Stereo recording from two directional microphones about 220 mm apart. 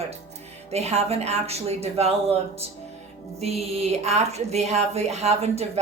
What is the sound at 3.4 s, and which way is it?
Speech, 30° right (ahead or behind).